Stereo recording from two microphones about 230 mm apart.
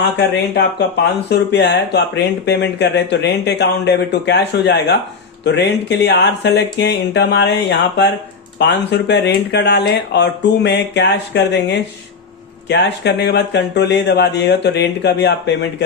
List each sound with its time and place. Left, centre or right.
1.3 s speech: left